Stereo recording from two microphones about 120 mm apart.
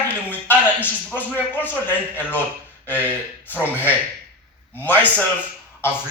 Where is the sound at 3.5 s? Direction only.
15° left (ahead or behind).